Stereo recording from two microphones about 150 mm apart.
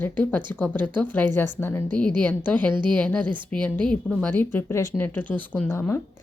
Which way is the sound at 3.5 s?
10° left (ahead or behind).